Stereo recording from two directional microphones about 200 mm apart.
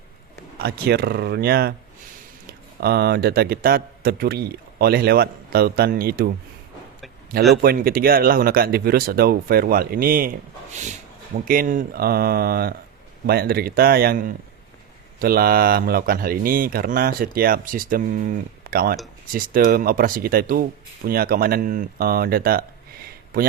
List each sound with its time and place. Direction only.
0.6 s speech: 55° right (ahead or behind)
7.5 s speech: 50° right (ahead or behind)